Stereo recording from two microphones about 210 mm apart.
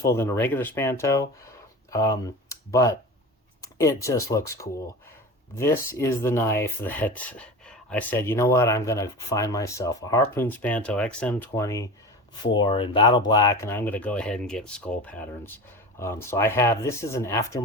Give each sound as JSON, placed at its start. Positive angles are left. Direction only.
{"t": 0.0, "sound": "speech", "side_deg": 15}